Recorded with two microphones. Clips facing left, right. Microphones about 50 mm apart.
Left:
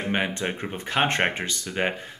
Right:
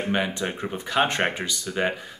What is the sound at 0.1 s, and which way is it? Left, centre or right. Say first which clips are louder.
Speech: even; left.